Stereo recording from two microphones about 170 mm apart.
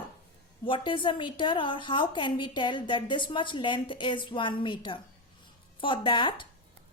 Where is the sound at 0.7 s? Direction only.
30° left (ahead or behind).